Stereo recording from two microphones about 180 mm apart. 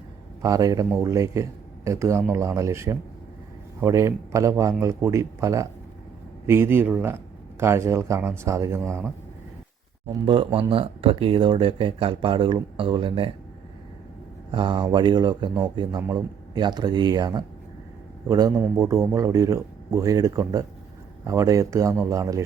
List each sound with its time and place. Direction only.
0.4 s a man's voice: 20° right (ahead or behind)
10.1 s speech: 25° right (ahead or behind)
14.5 s a man's voice: 25° right (ahead or behind)